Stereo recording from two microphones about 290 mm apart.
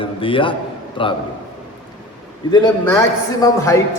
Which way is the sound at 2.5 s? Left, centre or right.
Centre.